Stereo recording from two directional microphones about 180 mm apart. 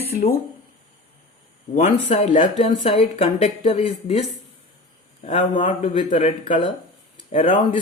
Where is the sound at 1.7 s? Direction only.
40° left (ahead or behind).